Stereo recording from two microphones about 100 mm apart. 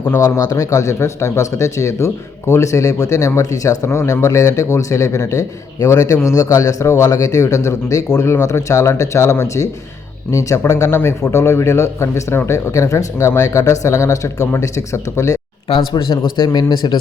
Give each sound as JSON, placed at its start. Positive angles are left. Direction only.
{"t": 0.2, "sound": "a man's voice", "side_deg": 35}
{"t": 15.7, "sound": "speech", "side_deg": 50}